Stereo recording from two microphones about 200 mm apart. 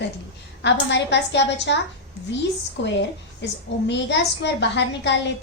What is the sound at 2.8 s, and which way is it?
A woman's voice, 60° left (ahead or behind).